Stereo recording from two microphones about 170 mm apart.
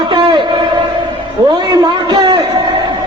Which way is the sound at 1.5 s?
25° right (ahead or behind).